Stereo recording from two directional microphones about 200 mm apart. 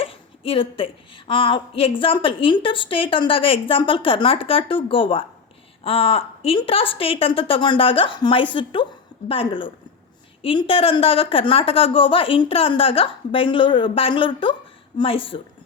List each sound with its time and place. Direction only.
0.0 s a woman's voice: 30° left (ahead or behind)